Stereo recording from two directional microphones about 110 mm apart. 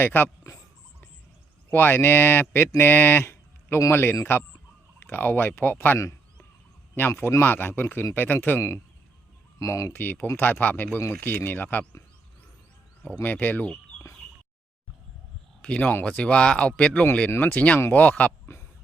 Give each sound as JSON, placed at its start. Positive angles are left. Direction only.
{"t": 0.0, "sound": "speech", "side_deg": 20}
{"t": 1.7, "sound": "speech", "side_deg": 20}
{"t": 13.1, "sound": "speech", "side_deg": 15}
{"t": 15.6, "sound": "speech", "side_deg": 10}